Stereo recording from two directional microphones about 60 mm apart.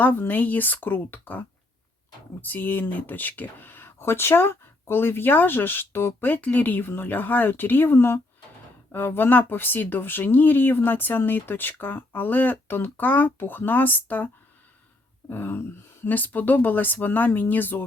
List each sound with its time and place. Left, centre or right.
0.0 s speech: left
7.9 s speech: left
15.3 s speech: left